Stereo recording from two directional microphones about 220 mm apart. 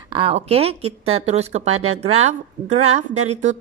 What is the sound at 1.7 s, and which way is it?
Speech, 75° right (ahead or behind).